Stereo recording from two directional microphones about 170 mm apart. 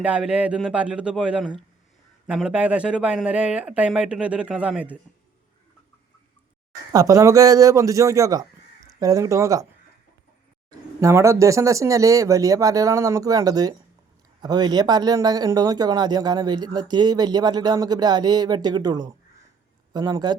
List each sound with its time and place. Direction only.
0.0 s a man's voice: 5° right (ahead or behind)
6.9 s a man's voice: 20° right (ahead or behind)
10.7 s a man's voice: 20° right (ahead or behind)